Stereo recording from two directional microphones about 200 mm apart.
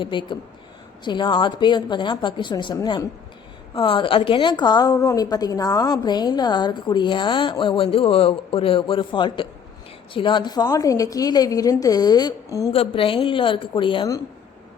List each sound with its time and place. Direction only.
0.0 s a woman's voice: 25° left (ahead or behind)
12.7 s a woman's voice: 30° left (ahead or behind)